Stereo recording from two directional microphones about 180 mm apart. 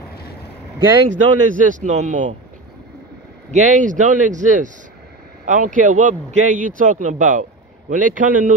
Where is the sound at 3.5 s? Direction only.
45° right (ahead or behind).